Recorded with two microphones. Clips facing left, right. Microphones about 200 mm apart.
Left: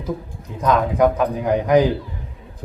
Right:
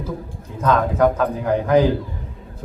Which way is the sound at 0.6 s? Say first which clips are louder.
Even; 15° left (ahead or behind).